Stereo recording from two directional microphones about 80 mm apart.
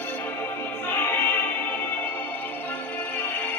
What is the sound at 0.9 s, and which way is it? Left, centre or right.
Music, left.